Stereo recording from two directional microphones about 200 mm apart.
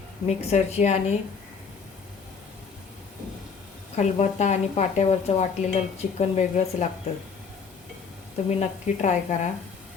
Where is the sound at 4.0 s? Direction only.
35° left (ahead or behind).